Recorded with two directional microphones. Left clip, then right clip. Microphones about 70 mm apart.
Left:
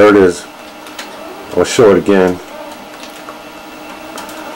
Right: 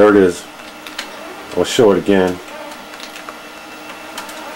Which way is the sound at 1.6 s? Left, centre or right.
Right.